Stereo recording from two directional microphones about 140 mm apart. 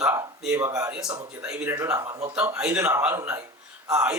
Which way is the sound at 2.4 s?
10° right (ahead or behind).